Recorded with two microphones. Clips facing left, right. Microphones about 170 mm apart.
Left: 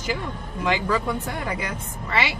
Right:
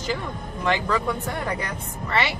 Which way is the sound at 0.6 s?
10° left (ahead or behind).